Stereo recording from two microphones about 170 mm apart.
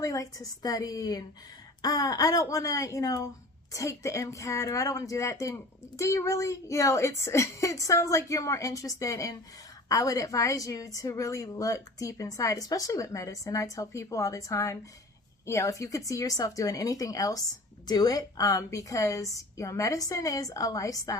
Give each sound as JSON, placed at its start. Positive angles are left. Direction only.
{"t": 0.0, "sound": "a woman's voice", "side_deg": 20}